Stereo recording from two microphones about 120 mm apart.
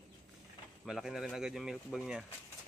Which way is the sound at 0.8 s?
5° right (ahead or behind).